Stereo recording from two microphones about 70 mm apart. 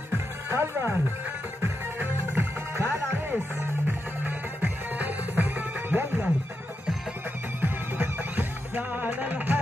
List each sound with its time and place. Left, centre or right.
0.5 s music: right
7.6 s music: right